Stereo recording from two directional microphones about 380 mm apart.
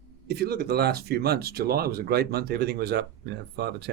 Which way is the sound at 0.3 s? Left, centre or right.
Right.